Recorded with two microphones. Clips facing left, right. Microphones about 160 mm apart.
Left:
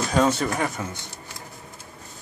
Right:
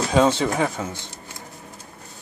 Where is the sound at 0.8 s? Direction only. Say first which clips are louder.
Right 2 dB; 10° right (ahead or behind).